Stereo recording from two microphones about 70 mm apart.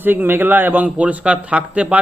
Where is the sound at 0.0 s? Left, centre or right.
Right.